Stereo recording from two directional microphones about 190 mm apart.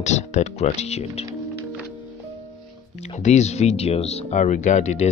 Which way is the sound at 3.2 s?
35° left (ahead or behind).